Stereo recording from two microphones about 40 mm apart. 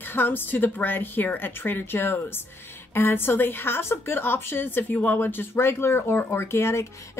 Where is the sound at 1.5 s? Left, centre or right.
Left.